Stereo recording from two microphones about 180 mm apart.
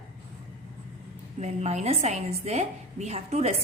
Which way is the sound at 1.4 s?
40° right (ahead or behind).